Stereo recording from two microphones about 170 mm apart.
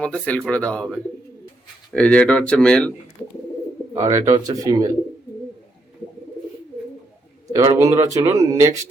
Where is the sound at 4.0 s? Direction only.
20° right (ahead or behind).